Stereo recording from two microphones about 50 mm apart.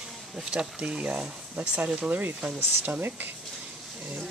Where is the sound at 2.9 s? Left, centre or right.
Right.